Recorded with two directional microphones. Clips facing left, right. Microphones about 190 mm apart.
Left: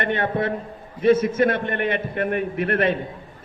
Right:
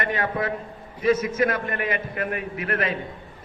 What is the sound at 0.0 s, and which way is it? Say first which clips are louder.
A man's voice: left 3 dB; 30° left (ahead or behind).